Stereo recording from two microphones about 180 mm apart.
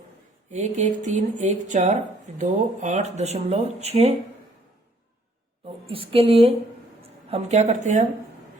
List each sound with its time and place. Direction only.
0.5 s speech: 40° right (ahead or behind)
5.9 s speech: 30° right (ahead or behind)